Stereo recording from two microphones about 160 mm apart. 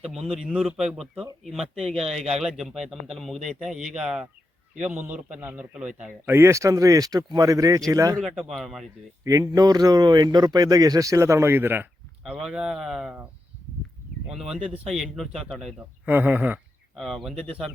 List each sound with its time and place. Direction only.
0.3 s a man's voice: 5° right (ahead or behind); by 8.2 s 20° right (ahead or behind)
8.2 s a man's voice: centre (ahead or behind)
9.2 s a man's voice: 20° right (ahead or behind); by 13.2 s 5° right (ahead or behind)
14.3 s a man's voice: centre (ahead or behind)
16.0 s speech: 10° right (ahead or behind)
17.0 s a man's voice: centre (ahead or behind)